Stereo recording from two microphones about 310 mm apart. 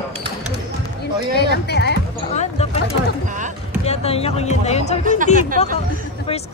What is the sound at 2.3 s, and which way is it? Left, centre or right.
Music, left.